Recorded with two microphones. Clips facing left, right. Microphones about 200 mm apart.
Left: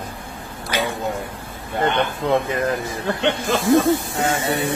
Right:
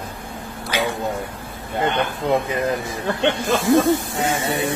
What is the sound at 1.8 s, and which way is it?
Speech, 15° right (ahead or behind).